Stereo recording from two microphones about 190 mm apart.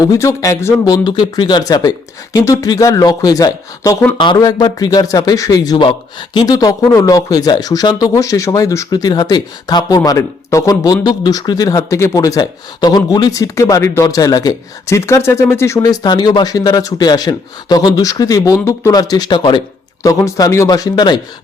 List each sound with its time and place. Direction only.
0.0 s a man's voice: 15° left (ahead or behind)